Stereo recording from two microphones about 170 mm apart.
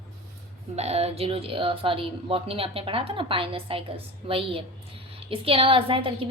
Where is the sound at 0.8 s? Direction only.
40° right (ahead or behind).